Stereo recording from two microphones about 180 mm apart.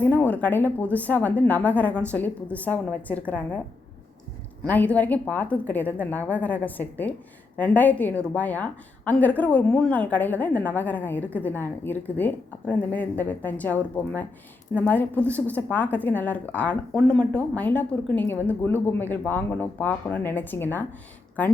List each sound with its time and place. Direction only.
0.0 s a woman's voice: 10° left (ahead or behind)
4.6 s a woman's voice: 10° left (ahead or behind)